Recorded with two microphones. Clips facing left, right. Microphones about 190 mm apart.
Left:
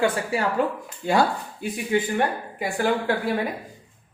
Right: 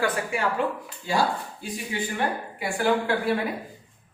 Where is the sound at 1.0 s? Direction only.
55° left (ahead or behind).